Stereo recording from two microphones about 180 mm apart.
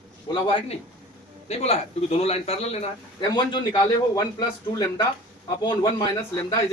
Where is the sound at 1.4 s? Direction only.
35° left (ahead or behind); by 6.6 s 20° left (ahead or behind).